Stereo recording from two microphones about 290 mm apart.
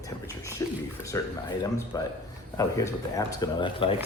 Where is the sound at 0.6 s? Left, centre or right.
Centre.